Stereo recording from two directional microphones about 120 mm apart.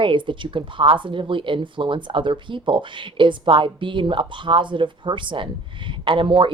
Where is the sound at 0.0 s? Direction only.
45° right (ahead or behind).